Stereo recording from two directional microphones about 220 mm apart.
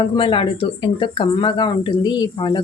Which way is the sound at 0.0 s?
25° left (ahead or behind).